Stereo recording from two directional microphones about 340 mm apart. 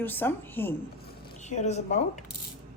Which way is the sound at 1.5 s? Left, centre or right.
Centre.